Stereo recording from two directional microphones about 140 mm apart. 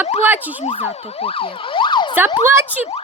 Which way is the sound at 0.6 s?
50° left (ahead or behind).